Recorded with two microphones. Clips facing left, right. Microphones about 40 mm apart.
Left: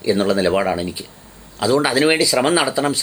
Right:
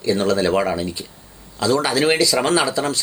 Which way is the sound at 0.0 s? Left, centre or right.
Centre.